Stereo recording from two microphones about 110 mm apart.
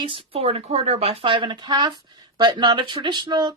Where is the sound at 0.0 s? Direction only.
50° right (ahead or behind).